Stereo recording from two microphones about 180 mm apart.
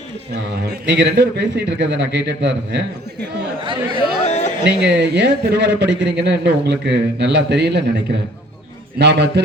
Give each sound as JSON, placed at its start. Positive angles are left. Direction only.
{"t": 0.7, "sound": "a man's voice", "side_deg": -70}
{"t": 3.6, "sound": "speech", "side_deg": -25}
{"t": 4.3, "sound": "a sound", "side_deg": 40}
{"t": 4.6, "sound": "a man's voice", "side_deg": -70}
{"t": 9.0, "sound": "a man's voice", "side_deg": -70}